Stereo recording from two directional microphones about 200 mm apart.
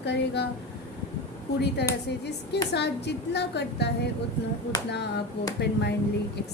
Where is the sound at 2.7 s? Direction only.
55° left (ahead or behind).